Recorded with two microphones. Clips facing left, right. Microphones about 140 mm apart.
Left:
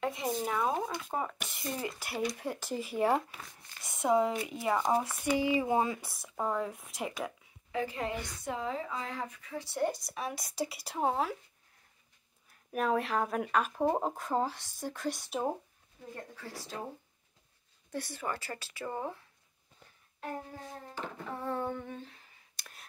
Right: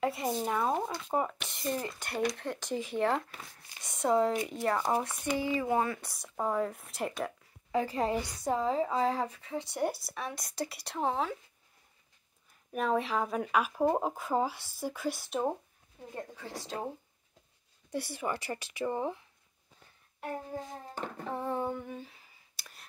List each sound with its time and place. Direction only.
0.0 s speech: 5° right (ahead or behind); by 5.9 s 15° left (ahead or behind)
5.9 s speech: 5° left (ahead or behind)
7.8 s a woman's voice: 35° right (ahead or behind); by 11.3 s 5° left (ahead or behind)
12.7 s speech: centre (ahead or behind)
16.3 s a woman's voice: 20° right (ahead or behind)
17.9 s speech: 10° right (ahead or behind)
21.4 s humming: 15° right (ahead or behind)